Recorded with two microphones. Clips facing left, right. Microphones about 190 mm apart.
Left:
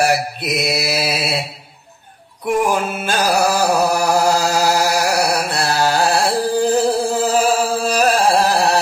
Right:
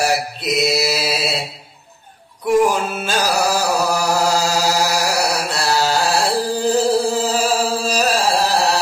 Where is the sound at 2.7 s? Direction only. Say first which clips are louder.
Left 1 dB; 55° left (ahead or behind).